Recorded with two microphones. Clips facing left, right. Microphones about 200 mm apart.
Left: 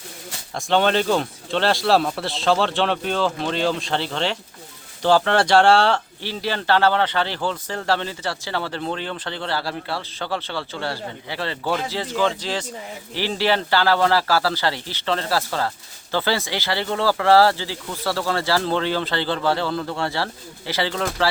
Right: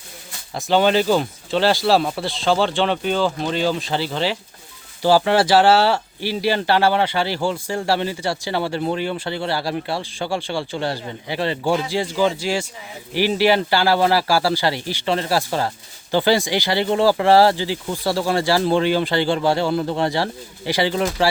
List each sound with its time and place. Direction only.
0.5 s speech: 5° right (ahead or behind)